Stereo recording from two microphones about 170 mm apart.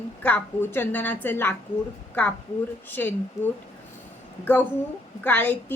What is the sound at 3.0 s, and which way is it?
Speech, 10° left (ahead or behind).